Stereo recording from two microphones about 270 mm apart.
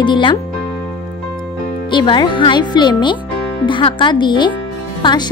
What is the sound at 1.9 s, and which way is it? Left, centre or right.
A woman's voice, centre.